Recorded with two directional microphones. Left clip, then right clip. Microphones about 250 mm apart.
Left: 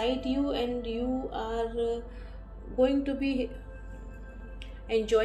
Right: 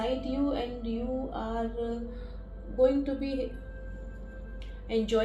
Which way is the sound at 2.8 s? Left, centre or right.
Left.